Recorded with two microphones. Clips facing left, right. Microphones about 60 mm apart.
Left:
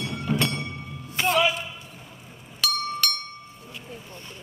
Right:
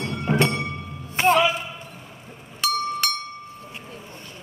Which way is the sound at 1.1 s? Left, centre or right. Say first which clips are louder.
Right 5 dB; right.